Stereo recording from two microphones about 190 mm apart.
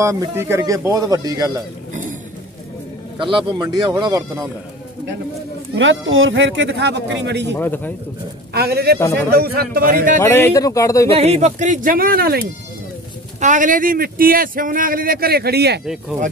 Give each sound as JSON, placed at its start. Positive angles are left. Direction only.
{"t": 0.0, "sound": "speech", "side_deg": -15}
{"t": 3.2, "sound": "speech", "side_deg": -25}
{"t": 5.8, "sound": "speech", "side_deg": -85}
{"t": 7.5, "sound": "a man's voice", "side_deg": 10}
{"t": 8.5, "sound": "a man's voice", "side_deg": -55}
{"t": 10.2, "sound": "a man's voice", "side_deg": 10}
{"t": 11.1, "sound": "speech", "side_deg": -35}
{"t": 13.4, "sound": "speech", "side_deg": -40}
{"t": 15.8, "sound": "speech", "side_deg": -5}